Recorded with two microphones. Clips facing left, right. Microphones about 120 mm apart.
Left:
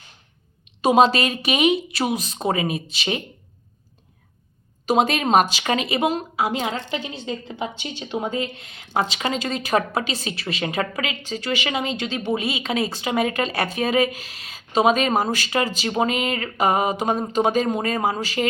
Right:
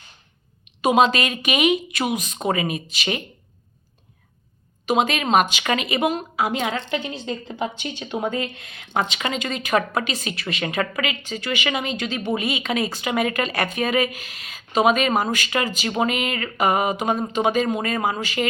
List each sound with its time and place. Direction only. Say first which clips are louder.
0.8 s a woman's voice: left 1 dB; 35° left (ahead or behind)
4.9 s a woman's voice: left 1 dB; 40° left (ahead or behind)
6.7 s a woman's voice: right 2 dB; 50° right (ahead or behind)
7.1 s a woman's voice: right 1 dB; centre (ahead or behind)
7.8 s a woman's voice: right 1 dB; 30° left (ahead or behind)